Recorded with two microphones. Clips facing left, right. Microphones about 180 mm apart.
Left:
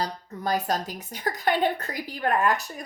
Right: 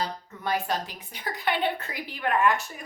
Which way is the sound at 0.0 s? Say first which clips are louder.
Left 2 dB; 40° left (ahead or behind).